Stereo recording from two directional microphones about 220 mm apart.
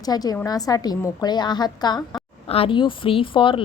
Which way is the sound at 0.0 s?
15° left (ahead or behind).